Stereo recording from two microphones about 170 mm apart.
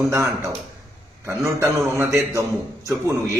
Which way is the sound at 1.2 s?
15° right (ahead or behind).